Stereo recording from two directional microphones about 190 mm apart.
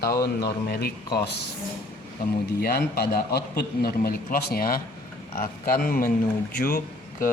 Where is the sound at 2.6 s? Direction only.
55° left (ahead or behind).